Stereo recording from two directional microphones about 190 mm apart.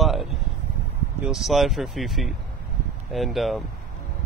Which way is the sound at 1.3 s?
Centre (ahead or behind).